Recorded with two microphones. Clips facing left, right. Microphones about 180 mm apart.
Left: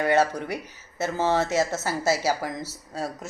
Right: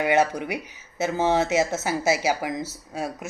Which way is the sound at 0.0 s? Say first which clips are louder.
Right 1 dB; 15° right (ahead or behind).